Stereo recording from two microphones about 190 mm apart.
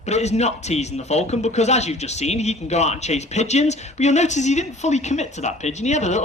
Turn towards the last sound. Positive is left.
turn(degrees=35)  # may be behind; listen again after turning